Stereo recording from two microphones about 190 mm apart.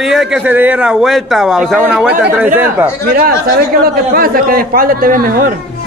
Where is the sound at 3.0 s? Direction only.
50° right (ahead or behind).